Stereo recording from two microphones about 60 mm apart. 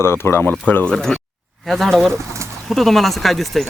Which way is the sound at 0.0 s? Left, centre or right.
Left.